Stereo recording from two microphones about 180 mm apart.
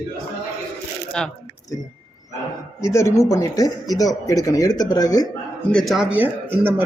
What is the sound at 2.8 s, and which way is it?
Speech, 15° left (ahead or behind).